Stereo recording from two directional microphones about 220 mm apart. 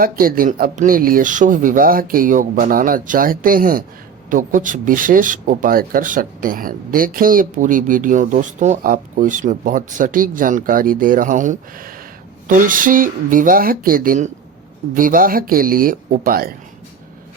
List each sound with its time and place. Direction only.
0.0 s speech: 40° right (ahead or behind)